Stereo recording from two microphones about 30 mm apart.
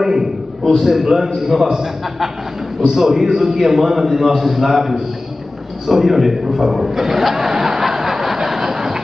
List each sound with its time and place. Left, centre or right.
0.0 s a man's voice: centre
2.9 s a man's voice: centre
7.9 s a sound: centre